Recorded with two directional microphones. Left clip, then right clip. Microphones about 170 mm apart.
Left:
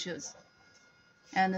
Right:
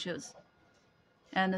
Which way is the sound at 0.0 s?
50° right (ahead or behind).